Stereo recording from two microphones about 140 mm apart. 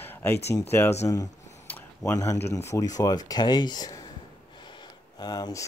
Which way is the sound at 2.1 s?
20° left (ahead or behind).